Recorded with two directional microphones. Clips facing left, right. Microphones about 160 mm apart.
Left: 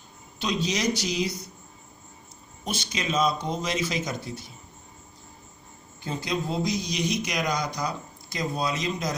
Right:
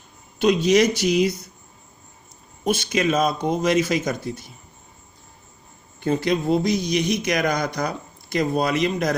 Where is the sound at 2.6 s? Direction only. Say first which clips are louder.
Right 10 dB; 55° right (ahead or behind).